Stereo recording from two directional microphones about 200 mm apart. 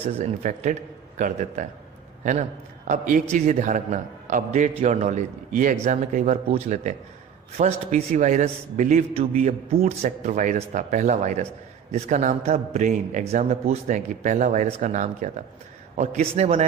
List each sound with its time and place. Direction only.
0.2 s a man's voice: 35° right (ahead or behind)